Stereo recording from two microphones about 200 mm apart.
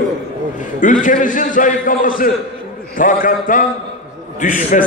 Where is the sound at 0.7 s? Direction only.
40° left (ahead or behind).